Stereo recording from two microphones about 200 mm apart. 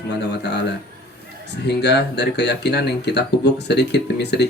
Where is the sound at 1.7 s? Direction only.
55° left (ahead or behind).